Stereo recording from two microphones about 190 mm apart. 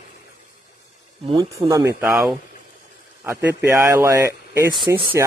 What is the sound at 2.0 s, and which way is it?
A man's voice, 5° right (ahead or behind).